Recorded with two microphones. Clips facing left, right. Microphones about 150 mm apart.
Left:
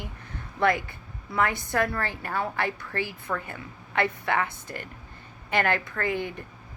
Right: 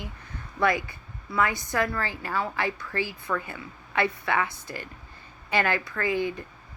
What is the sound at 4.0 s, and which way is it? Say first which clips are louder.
Speech: even; 50° left (ahead or behind).